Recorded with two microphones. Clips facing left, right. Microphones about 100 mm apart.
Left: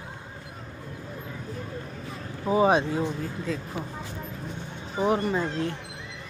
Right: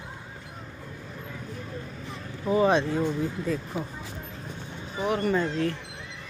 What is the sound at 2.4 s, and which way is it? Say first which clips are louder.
Speech: left 1 dB; 15° left (ahead or behind).